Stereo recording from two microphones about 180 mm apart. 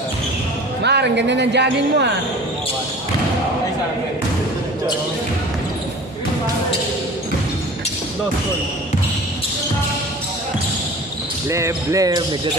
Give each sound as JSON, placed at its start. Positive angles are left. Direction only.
{"t": 0.8, "sound": "speech", "side_deg": -70}
{"t": 11.4, "sound": "speech", "side_deg": -15}